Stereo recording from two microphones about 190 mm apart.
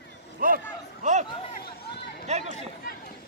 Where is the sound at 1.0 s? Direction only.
40° right (ahead or behind).